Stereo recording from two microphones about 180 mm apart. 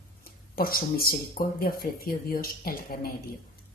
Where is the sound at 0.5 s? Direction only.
55° left (ahead or behind).